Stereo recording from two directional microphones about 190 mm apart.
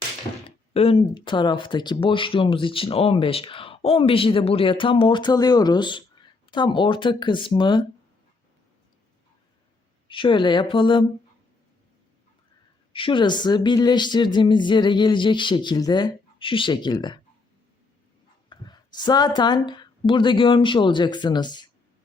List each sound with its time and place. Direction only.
0.4 s speech: 30° left (ahead or behind)
10.1 s speech: 25° left (ahead or behind)
12.9 s speech: 25° left (ahead or behind)
18.4 s a sound: 25° left (ahead or behind)
19.4 s speech: 25° left (ahead or behind)